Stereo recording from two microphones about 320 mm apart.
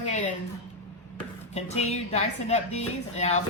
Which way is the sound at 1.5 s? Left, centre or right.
Centre.